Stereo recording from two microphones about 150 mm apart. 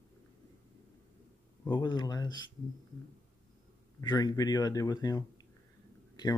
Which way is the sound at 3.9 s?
25° left (ahead or behind).